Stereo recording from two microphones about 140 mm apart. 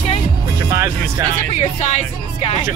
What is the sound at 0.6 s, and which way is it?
Music, 20° right (ahead or behind).